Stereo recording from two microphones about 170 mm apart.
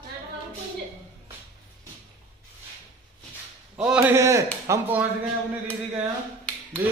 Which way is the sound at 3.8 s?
5° right (ahead or behind).